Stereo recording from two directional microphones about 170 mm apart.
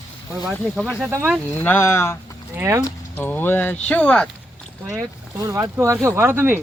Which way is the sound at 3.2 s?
10° left (ahead or behind).